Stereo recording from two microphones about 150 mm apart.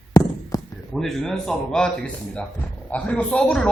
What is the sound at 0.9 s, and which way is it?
Speech, centre (ahead or behind).